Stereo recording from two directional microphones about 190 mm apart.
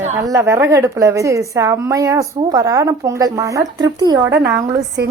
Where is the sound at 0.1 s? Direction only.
15° right (ahead or behind).